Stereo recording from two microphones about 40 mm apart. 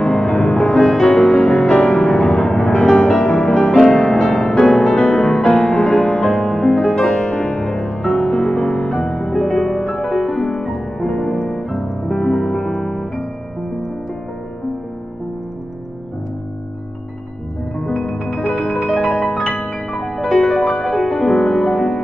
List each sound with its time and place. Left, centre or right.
0.0 s music: left
0.7 s music: centre
7.7 s music: centre
12.1 s music: centre
17.7 s music: centre
18.2 s music: centre